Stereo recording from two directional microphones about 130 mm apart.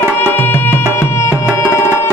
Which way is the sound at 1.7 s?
20° left (ahead or behind).